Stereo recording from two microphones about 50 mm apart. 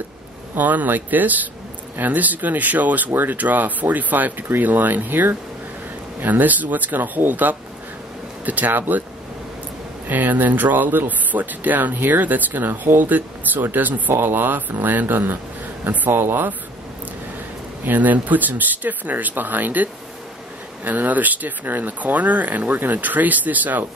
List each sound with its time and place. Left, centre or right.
0.6 s speech: right
10.0 s a man's voice: right
16.1 s speech: right
17.8 s speech: right